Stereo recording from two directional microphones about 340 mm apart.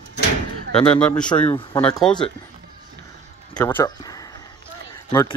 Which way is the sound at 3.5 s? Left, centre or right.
Centre.